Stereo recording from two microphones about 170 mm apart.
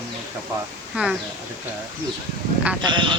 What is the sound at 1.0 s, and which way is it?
Speech, 10° right (ahead or behind).